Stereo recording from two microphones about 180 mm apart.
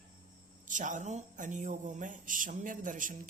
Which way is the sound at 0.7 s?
45° right (ahead or behind).